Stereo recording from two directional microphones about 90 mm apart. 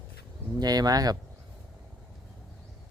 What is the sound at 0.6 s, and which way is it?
Speech, 45° right (ahead or behind).